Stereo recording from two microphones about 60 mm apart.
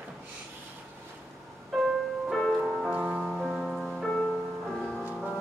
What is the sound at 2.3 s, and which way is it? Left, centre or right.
Music, centre.